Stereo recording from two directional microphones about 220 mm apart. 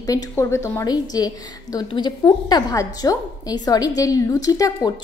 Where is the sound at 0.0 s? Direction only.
15° left (ahead or behind).